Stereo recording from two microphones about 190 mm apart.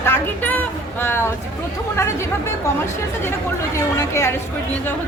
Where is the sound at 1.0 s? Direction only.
10° left (ahead or behind).